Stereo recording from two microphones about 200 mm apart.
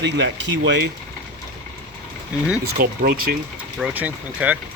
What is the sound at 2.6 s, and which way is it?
Speech, 50° right (ahead or behind).